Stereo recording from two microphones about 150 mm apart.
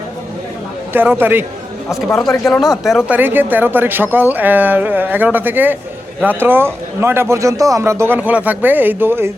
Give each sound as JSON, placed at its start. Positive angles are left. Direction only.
{"t": 0.9, "sound": "speech", "side_deg": -15}
{"t": 1.9, "sound": "speech", "side_deg": 0}
{"t": 3.1, "sound": "speech", "side_deg": -10}